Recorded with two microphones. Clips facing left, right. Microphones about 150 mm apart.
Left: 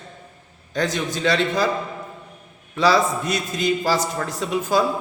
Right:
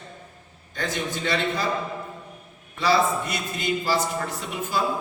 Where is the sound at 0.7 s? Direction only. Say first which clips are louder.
Left 5 dB; 90° left.